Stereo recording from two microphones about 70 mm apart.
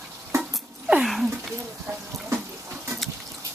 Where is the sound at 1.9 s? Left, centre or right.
Right.